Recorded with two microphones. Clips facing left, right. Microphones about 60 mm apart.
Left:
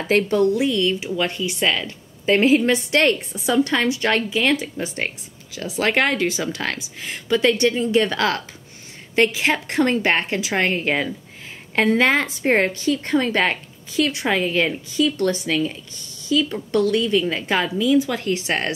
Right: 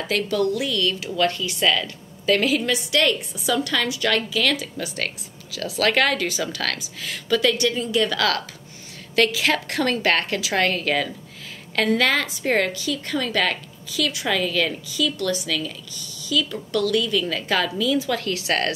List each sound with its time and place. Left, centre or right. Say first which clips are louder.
0.1 s a woman's voice: left 5 dB; left